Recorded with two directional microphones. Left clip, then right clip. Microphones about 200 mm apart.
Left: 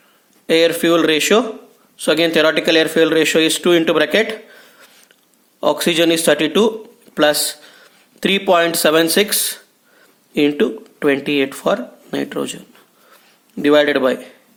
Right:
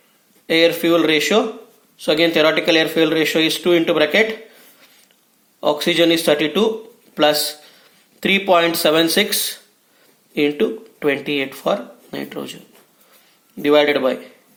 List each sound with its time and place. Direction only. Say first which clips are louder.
0.4 s a man's voice: left 1 dB; 35° left (ahead or behind)
13.6 s speech: left 1 dB; 35° left (ahead or behind)